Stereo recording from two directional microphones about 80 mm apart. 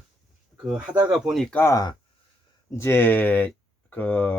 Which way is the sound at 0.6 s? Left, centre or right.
Centre.